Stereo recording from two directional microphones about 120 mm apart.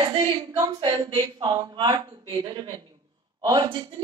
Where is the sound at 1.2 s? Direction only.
35° right (ahead or behind).